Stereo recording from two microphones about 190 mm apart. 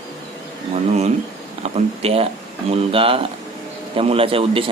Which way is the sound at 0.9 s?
35° right (ahead or behind).